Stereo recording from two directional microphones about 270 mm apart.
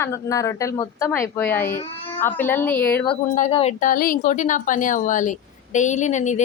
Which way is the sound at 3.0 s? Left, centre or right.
Left.